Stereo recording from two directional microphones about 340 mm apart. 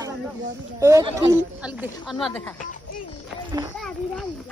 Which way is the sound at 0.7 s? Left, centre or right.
Centre.